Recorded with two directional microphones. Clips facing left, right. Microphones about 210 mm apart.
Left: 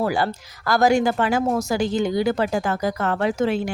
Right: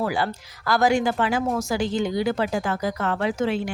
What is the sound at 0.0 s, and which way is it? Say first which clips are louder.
Speech: left 3 dB; 40° left (ahead or behind).